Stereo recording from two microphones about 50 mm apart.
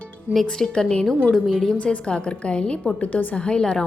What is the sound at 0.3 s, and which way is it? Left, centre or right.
Speech, right.